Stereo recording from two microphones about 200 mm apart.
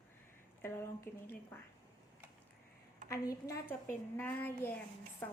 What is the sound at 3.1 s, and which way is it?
A woman's voice, 15° left (ahead or behind).